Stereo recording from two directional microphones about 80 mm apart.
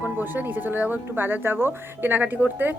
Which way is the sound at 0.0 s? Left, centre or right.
Right.